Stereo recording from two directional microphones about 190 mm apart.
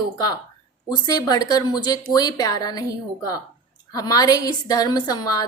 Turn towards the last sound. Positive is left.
turn(degrees=20)  # may be behind; listen again after turning